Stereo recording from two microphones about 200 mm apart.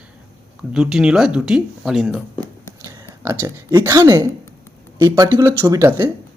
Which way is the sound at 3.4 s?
15° right (ahead or behind).